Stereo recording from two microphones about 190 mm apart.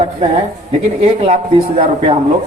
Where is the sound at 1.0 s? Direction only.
30° right (ahead or behind).